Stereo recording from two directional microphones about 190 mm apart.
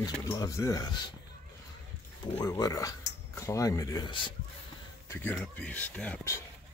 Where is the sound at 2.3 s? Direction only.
15° left (ahead or behind).